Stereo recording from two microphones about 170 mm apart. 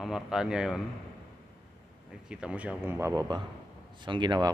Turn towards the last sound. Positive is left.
turn(degrees=-25)  # may be behind; listen again after turning